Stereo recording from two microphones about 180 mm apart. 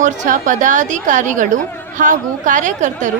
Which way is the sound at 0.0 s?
45° right (ahead or behind).